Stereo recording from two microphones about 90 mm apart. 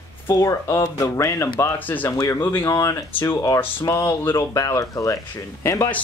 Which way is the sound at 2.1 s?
35° left (ahead or behind).